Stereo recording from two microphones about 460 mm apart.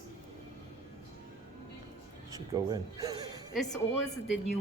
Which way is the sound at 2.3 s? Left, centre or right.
Centre.